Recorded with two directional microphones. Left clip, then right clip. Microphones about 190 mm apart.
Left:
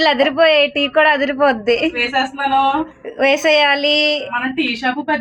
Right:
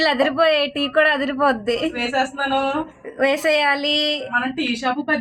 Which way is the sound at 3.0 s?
5° left (ahead or behind).